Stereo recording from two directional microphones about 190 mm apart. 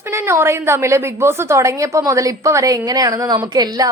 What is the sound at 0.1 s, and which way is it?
A woman's voice, 15° right (ahead or behind).